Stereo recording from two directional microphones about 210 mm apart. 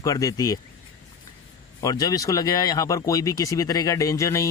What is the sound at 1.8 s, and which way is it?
Speech, 15° left (ahead or behind).